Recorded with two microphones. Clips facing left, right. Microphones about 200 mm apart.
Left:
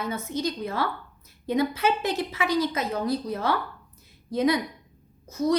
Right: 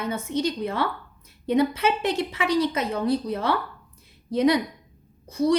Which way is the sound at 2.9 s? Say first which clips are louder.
Right 3 dB; 30° right (ahead or behind).